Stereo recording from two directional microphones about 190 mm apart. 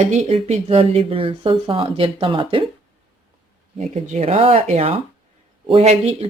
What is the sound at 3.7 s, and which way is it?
Speech, 35° right (ahead or behind).